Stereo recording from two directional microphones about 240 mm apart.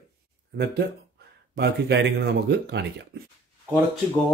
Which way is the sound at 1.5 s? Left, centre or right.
Right.